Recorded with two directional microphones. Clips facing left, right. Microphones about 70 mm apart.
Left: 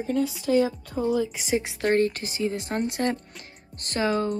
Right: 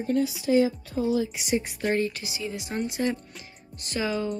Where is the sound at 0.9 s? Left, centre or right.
Left.